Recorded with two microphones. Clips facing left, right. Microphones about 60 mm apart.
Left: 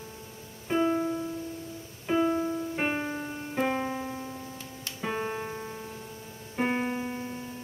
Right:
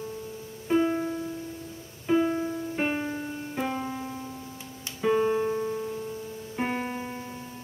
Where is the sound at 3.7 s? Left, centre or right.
Centre.